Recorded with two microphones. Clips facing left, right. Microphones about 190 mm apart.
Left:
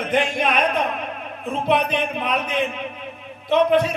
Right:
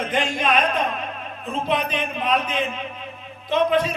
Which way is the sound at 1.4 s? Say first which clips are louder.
Left 3 dB; 60° left (ahead or behind).